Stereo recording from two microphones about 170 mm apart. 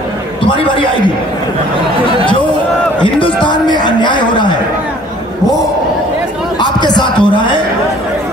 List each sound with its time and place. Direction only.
0.5 s a man's voice: 30° left (ahead or behind)
3.0 s a man's voice: 30° left (ahead or behind)
6.6 s a sound: 25° left (ahead or behind)